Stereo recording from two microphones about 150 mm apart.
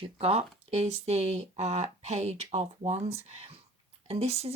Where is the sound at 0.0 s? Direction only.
45° right (ahead or behind).